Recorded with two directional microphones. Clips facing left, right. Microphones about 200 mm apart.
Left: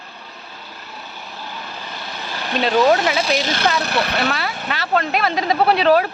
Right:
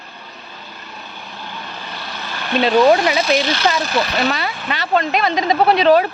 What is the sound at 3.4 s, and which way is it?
Speech, 50° left (ahead or behind).